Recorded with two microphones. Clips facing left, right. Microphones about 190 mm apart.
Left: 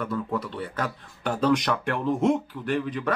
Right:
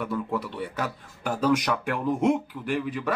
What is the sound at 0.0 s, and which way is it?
Speech, 10° right (ahead or behind).